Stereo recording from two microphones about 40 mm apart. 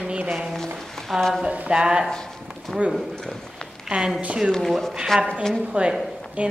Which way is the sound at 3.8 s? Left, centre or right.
Centre.